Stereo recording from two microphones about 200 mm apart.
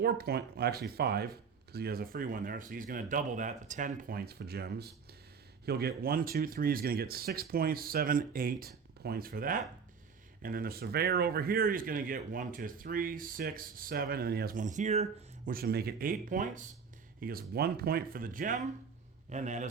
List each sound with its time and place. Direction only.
0.0 s speech: 50° right (ahead or behind); by 15.0 s 35° right (ahead or behind)
15.4 s a man's voice: 50° right (ahead or behind)